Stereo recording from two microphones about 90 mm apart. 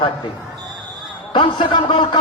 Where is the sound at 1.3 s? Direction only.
65° left (ahead or behind).